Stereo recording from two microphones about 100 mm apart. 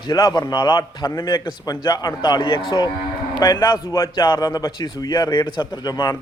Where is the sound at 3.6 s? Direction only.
45° left (ahead or behind).